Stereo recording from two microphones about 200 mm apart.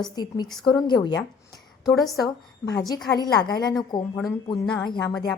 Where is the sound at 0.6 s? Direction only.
20° left (ahead or behind).